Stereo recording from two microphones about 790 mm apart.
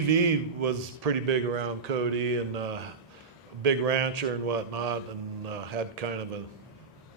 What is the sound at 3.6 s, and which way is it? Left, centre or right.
Speech, right.